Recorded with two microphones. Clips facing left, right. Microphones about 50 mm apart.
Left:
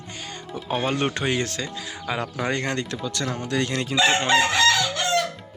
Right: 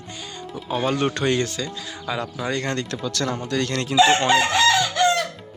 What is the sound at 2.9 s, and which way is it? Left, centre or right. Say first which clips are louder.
Speech: right 2 dB; centre.